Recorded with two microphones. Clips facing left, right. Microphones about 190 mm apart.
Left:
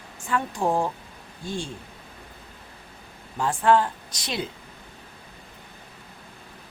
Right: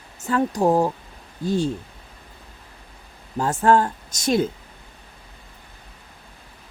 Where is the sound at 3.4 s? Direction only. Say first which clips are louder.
Right 3 dB; 40° right (ahead or behind).